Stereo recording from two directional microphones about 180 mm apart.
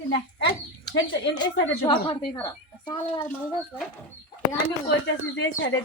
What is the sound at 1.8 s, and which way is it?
Speech, 25° left (ahead or behind).